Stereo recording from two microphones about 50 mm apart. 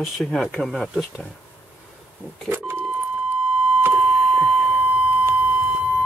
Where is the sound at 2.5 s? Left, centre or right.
Right.